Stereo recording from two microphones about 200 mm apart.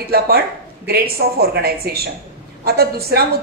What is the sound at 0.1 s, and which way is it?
A woman's voice, 50° right (ahead or behind).